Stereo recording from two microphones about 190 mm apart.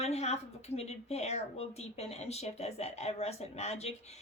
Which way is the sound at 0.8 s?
35° left (ahead or behind).